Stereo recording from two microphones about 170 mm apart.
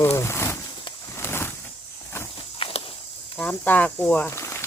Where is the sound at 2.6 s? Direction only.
30° left (ahead or behind).